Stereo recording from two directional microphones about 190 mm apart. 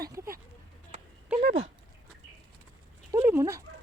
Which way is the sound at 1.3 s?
10° right (ahead or behind).